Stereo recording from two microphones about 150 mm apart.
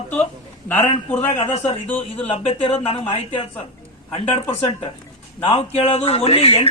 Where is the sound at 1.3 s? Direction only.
50° left (ahead or behind).